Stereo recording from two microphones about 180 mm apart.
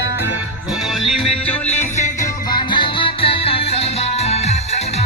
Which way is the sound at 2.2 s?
25° left (ahead or behind).